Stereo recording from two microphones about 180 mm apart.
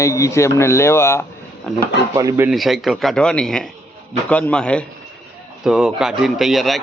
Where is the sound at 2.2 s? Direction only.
15° right (ahead or behind).